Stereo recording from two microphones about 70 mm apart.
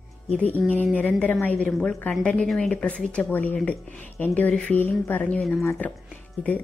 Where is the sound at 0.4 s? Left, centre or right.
Left.